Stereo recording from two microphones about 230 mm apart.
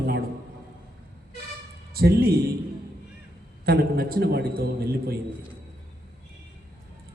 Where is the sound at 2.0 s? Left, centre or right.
Right.